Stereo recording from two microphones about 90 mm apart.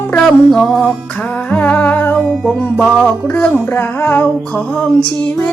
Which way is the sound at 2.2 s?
Centre (ahead or behind).